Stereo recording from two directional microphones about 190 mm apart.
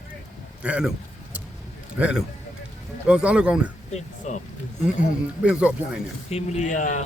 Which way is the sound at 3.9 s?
40° left (ahead or behind).